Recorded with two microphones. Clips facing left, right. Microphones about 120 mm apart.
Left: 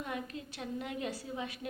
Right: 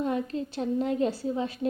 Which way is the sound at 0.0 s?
30° right (ahead or behind).